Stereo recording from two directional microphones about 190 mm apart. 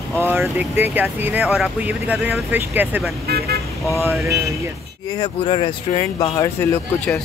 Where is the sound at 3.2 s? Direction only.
55° right (ahead or behind).